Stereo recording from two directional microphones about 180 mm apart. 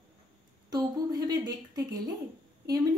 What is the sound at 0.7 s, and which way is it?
A child's voice, 20° right (ahead or behind).